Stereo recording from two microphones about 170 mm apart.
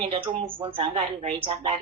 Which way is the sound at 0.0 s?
30° right (ahead or behind).